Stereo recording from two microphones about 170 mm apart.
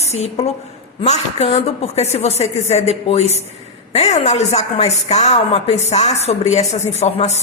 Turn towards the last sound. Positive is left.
turn(degrees=40)  # may be behind; listen again after turning